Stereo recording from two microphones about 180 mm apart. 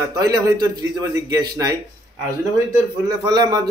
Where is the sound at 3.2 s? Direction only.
20° right (ahead or behind).